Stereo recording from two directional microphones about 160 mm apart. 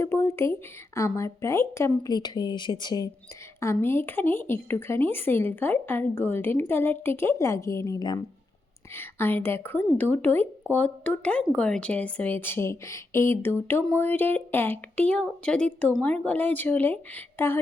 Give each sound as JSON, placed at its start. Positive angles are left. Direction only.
{"t": 0.0, "sound": "a sound", "side_deg": 15}
{"t": 0.9, "sound": "speech", "side_deg": 20}
{"t": 3.6, "sound": "a woman's voice", "side_deg": 15}
{"t": 8.9, "sound": "a woman's voice", "side_deg": 15}